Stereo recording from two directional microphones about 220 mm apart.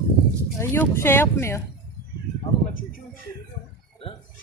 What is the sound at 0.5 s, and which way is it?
Speech, 10° left (ahead or behind).